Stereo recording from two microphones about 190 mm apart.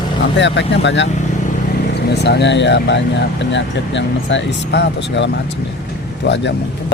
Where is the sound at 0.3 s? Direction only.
70° left (ahead or behind).